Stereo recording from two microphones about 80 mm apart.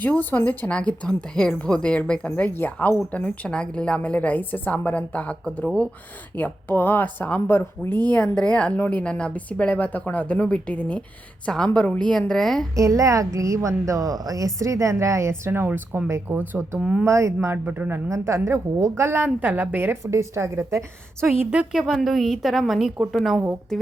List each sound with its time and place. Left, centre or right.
0.0 s speech: left
0.7 s a woman's voice: centre; by 7.9 s left
8.1 s a woman's voice: centre
12.7 s a woman's voice: right
16.7 s speech: centre
17.1 s a woman's voice: right
17.7 s speech: right
18.1 s a woman's voice: right
20.1 s a woman's voice: right
21.7 s a woman's voice: centre